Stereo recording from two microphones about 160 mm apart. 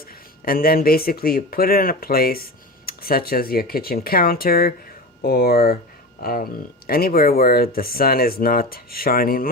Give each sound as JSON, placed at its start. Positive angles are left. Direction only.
{"t": 0.0, "sound": "speech", "side_deg": 65}